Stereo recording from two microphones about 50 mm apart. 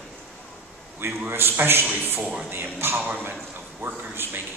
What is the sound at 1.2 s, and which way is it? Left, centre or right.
A man's voice, right.